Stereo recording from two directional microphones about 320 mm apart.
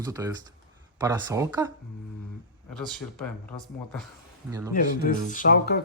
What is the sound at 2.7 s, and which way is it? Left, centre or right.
Speech, centre.